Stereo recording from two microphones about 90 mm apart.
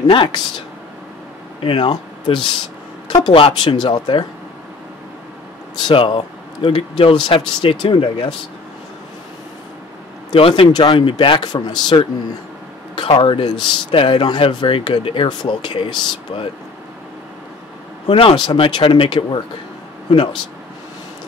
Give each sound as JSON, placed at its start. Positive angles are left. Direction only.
{"t": 0.0, "sound": "speech", "side_deg": 60}
{"t": 1.6, "sound": "speech", "side_deg": 85}
{"t": 1.9, "sound": "speech", "side_deg": 65}
{"t": 3.1, "sound": "speech", "side_deg": 55}
{"t": 3.3, "sound": "speech", "side_deg": 80}
{"t": 3.7, "sound": "speech", "side_deg": 50}
{"t": 5.8, "sound": "speech", "side_deg": 60}
{"t": 10.3, "sound": "speech", "side_deg": 90}
{"t": 11.3, "sound": "speech", "side_deg": 50}
{"t": 12.9, "sound": "speech", "side_deg": 75}
{"t": 18.0, "sound": "speech", "side_deg": 80}